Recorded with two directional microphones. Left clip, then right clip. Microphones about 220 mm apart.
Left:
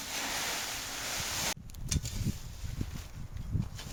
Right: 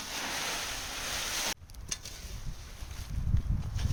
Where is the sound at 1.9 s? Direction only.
25° left (ahead or behind).